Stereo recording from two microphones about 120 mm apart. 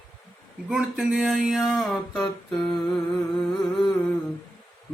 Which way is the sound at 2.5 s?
5° left (ahead or behind).